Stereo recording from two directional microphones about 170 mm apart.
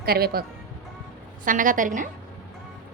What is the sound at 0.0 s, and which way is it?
Speech, 65° right (ahead or behind).